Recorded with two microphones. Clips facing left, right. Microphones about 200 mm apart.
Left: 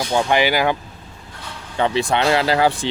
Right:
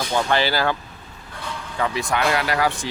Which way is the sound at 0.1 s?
15° left (ahead or behind).